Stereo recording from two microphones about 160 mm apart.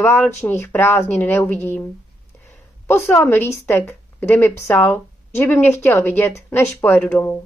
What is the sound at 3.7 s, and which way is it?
Speech, 15° left (ahead or behind).